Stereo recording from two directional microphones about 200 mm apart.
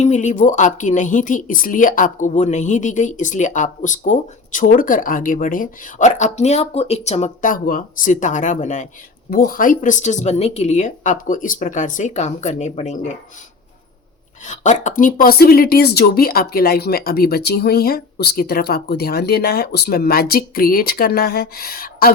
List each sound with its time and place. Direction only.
0.0 s a woman's voice: 35° left (ahead or behind)
14.4 s speech: 35° left (ahead or behind)